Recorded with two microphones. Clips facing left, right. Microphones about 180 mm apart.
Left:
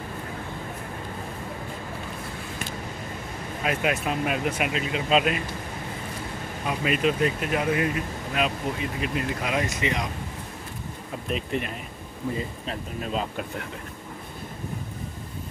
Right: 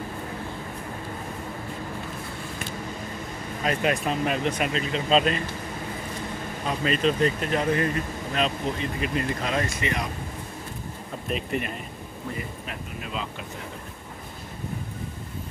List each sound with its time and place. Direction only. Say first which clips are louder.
3.6 s speech: right 1 dB; 5° left (ahead or behind)
6.6 s speech: even; 10° left (ahead or behind)
11.2 s speech: even; centre (ahead or behind)
12.4 s speech: left 3 dB; 35° left (ahead or behind)